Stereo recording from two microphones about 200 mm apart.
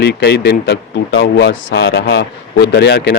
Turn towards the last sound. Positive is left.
turn(degrees=60)  # may be behind; listen again after turning